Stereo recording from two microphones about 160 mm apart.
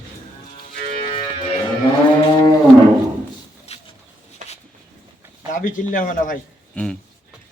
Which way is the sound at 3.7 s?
40° left (ahead or behind).